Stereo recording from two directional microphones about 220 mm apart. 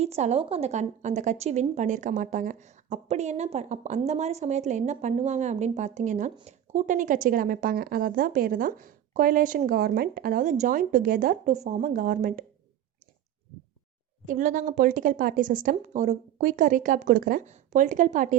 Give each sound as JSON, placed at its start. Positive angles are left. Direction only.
{"t": 0.0, "sound": "a woman's voice", "side_deg": -30}
{"t": 14.3, "sound": "a woman's voice", "side_deg": -35}